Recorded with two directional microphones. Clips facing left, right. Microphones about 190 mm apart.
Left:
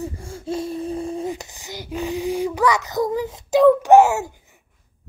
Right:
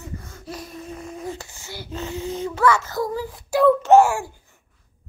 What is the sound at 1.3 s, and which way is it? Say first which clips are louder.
Child singing: left 3 dB; 15° left (ahead or behind).